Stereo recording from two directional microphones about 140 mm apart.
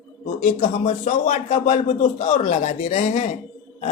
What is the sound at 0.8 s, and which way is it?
A man's voice, 70° left (ahead or behind).